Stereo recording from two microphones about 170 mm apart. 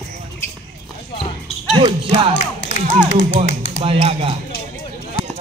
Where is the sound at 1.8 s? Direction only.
30° right (ahead or behind).